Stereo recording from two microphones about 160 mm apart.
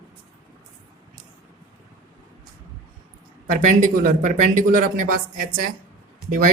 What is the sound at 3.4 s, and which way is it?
Speech, 55° right (ahead or behind).